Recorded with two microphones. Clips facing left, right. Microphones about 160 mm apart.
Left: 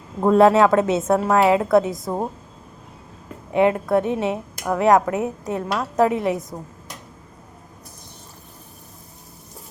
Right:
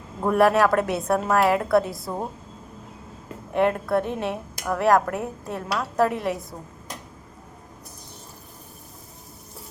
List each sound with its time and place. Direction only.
0.2 s a woman's voice: 20° left (ahead or behind)
3.5 s speech: 15° left (ahead or behind)